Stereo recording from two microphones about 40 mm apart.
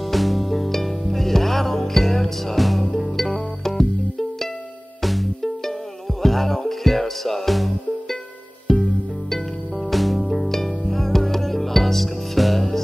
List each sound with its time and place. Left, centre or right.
0.0 s music: centre